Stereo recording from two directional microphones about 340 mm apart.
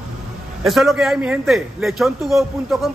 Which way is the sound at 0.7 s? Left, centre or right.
Centre.